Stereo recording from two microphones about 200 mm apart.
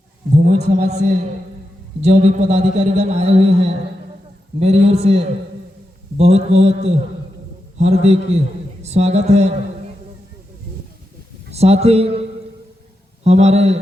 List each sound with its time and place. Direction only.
0.3 s a man's voice: 40° right (ahead or behind)
11.5 s a man's voice: 30° right (ahead or behind)
13.2 s a man's voice: 35° right (ahead or behind)